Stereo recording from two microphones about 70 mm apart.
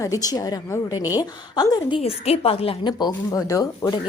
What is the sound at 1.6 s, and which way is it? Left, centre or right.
Speech, left.